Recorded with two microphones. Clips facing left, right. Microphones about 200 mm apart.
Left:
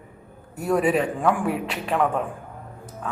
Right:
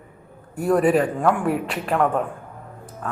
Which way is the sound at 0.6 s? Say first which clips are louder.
Right 3 dB; centre (ahead or behind).